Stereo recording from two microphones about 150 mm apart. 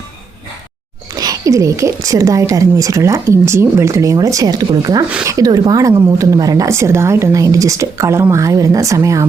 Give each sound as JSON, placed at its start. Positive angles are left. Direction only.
{"t": 1.1, "sound": "speech", "side_deg": -25}